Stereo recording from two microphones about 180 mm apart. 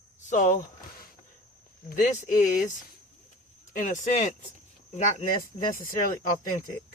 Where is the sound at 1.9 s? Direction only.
40° left (ahead or behind).